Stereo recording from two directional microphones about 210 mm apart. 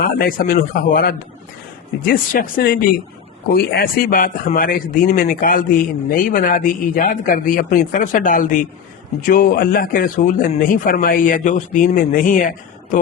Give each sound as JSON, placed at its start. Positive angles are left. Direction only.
{"t": 0.0, "sound": "a man's voice", "side_deg": 45}